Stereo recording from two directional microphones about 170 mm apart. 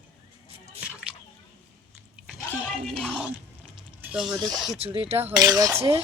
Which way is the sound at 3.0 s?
5° right (ahead or behind).